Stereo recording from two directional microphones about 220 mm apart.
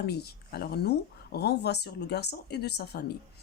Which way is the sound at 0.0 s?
45° left (ahead or behind).